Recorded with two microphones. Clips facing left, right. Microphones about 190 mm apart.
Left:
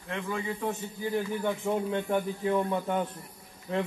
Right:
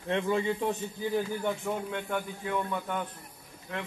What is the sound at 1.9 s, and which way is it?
A man's voice, 30° left (ahead or behind).